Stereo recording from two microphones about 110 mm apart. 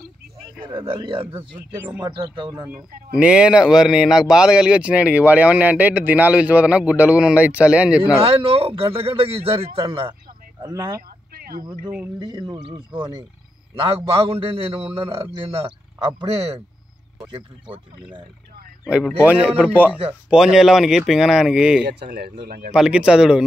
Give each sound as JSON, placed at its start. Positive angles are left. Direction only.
{"t": 0.7, "sound": "speech", "side_deg": -50}
{"t": 2.0, "sound": "speech", "side_deg": -45}
{"t": 2.7, "sound": "speech", "side_deg": -10}
{"t": 8.0, "sound": "speech", "side_deg": -60}
{"t": 10.6, "sound": "speech", "side_deg": -30}
{"t": 12.2, "sound": "speech", "side_deg": -45}
{"t": 13.7, "sound": "speech", "side_deg": -60}
{"t": 17.3, "sound": "speech", "side_deg": -45}
{"t": 19.2, "sound": "speech", "side_deg": -15}